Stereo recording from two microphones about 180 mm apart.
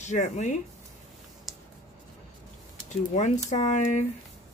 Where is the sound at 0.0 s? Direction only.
40° left (ahead or behind).